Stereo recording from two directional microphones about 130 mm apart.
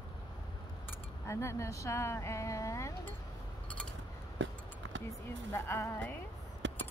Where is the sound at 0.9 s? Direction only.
20° left (ahead or behind).